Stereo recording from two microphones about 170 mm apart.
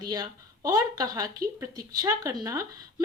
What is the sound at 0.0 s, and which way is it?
Speech, 25° right (ahead or behind).